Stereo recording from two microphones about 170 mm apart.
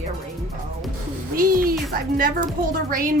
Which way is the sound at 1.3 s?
55° right (ahead or behind).